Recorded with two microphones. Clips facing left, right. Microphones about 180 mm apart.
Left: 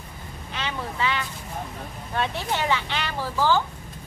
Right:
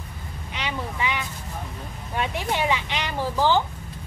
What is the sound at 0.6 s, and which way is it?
Vehicle, 15° right (ahead or behind).